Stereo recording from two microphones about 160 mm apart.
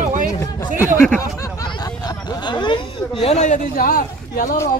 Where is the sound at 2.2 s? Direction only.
25° left (ahead or behind); by 4.5 s 60° left (ahead or behind).